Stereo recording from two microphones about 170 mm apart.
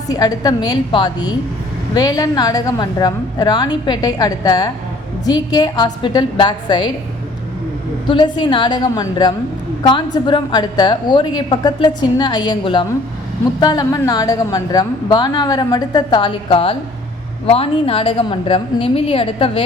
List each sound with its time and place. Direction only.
0.1 s a woman's voice: 20° left (ahead or behind)
8.0 s a woman's voice: 30° left (ahead or behind)